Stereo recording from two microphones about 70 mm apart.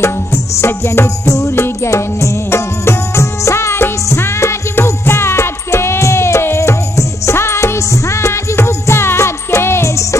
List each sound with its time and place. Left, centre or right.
0.0 s music: left